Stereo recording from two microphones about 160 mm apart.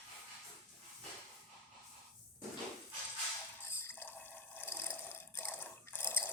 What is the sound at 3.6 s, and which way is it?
Water, 15° left (ahead or behind).